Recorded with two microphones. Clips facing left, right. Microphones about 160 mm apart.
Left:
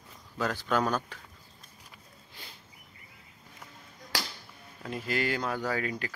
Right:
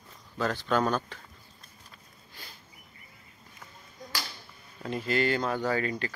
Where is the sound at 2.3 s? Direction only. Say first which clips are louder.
Right 1 dB; 20° left (ahead or behind).